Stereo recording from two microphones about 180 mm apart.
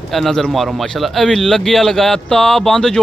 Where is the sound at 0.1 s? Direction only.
Centre (ahead or behind).